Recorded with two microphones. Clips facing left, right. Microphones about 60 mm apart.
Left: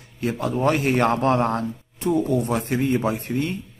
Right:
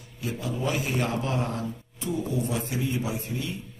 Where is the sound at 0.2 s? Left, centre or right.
Left.